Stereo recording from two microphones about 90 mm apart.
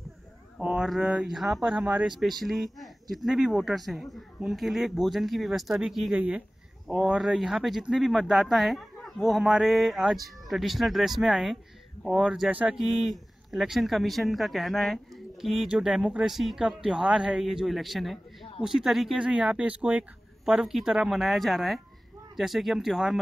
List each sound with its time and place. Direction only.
0.6 s a sound: 15° right (ahead or behind)
0.8 s speech: 5° right (ahead or behind)
1.7 s speech: 10° right (ahead or behind)
6.1 s speech: 15° right (ahead or behind)
12.4 s speech: 15° right (ahead or behind)
12.7 s speech: centre (ahead or behind)